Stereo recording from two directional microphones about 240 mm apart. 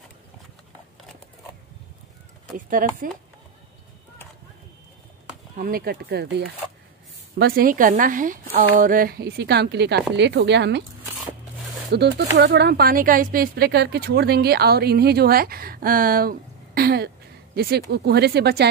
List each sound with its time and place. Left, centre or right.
2.5 s a woman's voice: right
5.6 s a woman's voice: right
11.9 s a woman's voice: right